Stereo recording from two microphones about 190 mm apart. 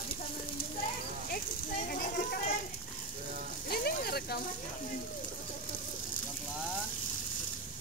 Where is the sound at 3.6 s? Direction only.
55° left (ahead or behind).